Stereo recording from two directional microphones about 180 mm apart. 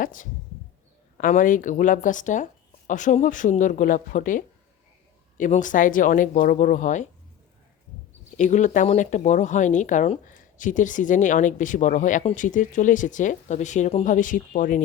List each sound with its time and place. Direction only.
0.0 s speech: 50° left (ahead or behind)
8.4 s speech: 45° left (ahead or behind)